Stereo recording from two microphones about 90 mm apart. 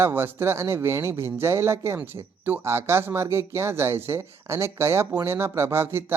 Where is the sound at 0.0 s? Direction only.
25° right (ahead or behind).